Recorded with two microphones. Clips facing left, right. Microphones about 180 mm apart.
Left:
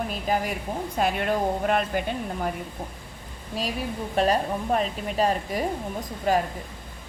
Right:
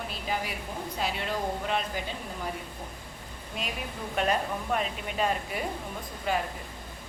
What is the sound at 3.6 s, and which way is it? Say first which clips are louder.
A woman's voice: left 7 dB; 35° left (ahead or behind).